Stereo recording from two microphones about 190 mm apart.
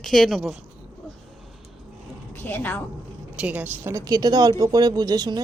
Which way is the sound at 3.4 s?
10° right (ahead or behind).